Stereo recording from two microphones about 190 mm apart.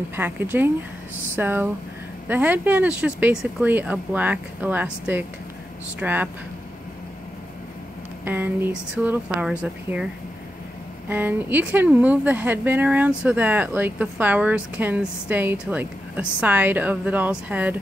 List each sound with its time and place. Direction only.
0.1 s speech: 10° right (ahead or behind)
8.3 s speech: 10° right (ahead or behind)
11.1 s speech: 10° right (ahead or behind)